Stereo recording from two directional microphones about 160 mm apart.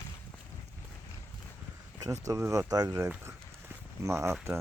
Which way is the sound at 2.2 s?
20° right (ahead or behind).